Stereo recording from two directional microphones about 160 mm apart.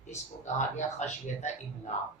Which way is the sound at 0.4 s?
50° left (ahead or behind).